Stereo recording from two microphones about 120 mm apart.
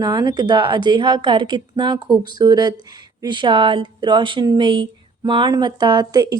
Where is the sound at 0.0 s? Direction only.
35° right (ahead or behind).